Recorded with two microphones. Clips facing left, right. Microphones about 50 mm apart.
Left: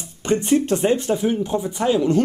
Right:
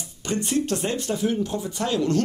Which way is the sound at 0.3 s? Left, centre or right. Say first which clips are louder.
Left 6 dB; left.